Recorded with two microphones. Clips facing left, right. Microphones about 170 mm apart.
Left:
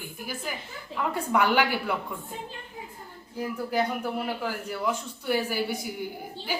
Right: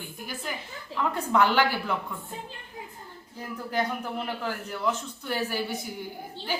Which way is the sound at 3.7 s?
10° left (ahead or behind).